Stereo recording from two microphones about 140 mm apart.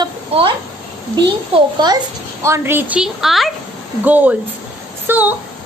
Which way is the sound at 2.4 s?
20° right (ahead or behind).